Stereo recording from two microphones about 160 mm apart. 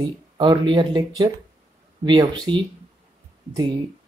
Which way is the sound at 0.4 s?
30° right (ahead or behind).